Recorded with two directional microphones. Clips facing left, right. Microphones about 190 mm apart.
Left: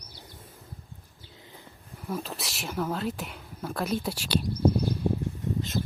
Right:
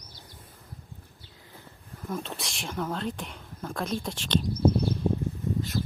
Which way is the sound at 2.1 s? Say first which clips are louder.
Left 1 dB; 5° left (ahead or behind).